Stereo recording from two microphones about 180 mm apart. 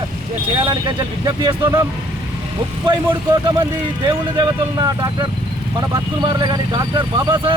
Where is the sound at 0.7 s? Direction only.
25° right (ahead or behind).